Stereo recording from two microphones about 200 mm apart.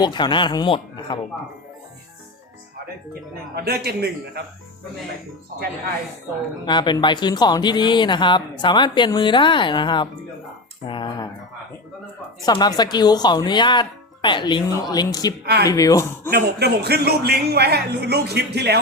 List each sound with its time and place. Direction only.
0.0 s speech: 20° left (ahead or behind)
3.5 s a man's voice: 50° right (ahead or behind)
6.7 s speech: 20° left (ahead or behind)
12.5 s speech: 20° left (ahead or behind)
16.3 s a man's voice: 55° right (ahead or behind)